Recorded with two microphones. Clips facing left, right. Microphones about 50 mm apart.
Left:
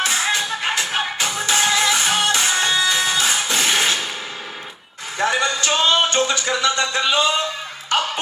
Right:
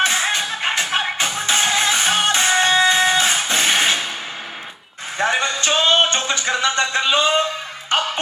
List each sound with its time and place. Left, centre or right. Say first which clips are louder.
0.0 s music: right 2 dB; right
5.1 s a sound: even; right
7.9 s music: even; right